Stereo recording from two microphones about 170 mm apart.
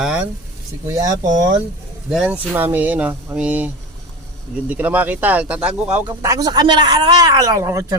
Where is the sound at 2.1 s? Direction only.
5° right (ahead or behind).